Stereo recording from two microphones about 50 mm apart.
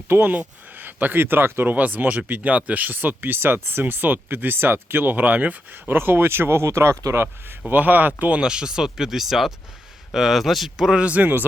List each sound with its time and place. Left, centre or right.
0.1 s speech: right
1.2 s speech: right
1.7 s speech: right
5.1 s speech: right
5.9 s speech: right
6.7 s speech: right
7.7 s speech: right
8.4 s speech: centre
10.9 s speech: right